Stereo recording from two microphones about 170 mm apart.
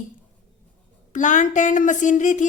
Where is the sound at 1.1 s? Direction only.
50° left (ahead or behind).